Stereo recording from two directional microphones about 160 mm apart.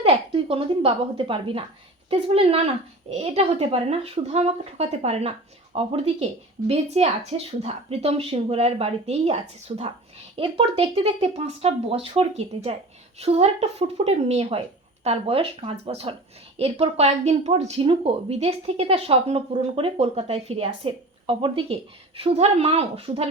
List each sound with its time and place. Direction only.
0.0 s speech: 35° right (ahead or behind)